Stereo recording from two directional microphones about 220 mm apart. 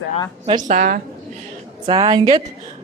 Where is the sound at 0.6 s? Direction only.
40° right (ahead or behind).